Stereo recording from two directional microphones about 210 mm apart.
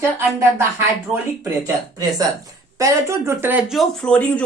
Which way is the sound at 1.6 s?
15° right (ahead or behind).